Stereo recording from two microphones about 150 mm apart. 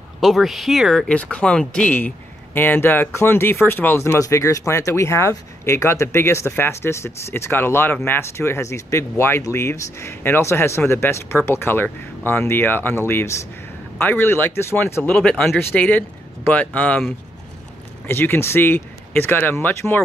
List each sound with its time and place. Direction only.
0.2 s speech: centre (ahead or behind)